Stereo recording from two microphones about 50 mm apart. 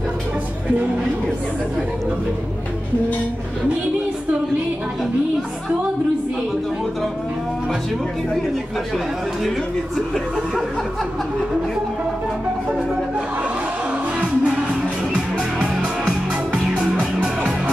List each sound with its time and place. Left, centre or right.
14.2 s music: right